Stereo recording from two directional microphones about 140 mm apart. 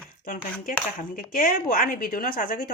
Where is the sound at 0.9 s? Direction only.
80° left.